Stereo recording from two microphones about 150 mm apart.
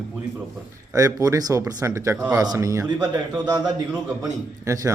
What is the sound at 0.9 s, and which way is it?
Speech, 25° right (ahead or behind).